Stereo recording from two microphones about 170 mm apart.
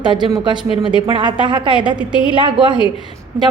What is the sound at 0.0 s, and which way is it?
A woman's voice, 25° right (ahead or behind).